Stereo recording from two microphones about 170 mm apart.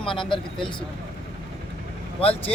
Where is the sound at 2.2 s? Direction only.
35° left (ahead or behind).